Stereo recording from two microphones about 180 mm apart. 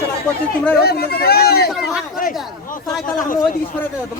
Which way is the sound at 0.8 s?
60° left (ahead or behind).